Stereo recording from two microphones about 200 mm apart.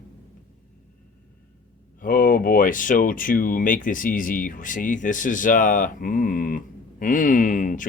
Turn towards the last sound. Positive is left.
turn(degrees=40)  # may be behind; listen again after turning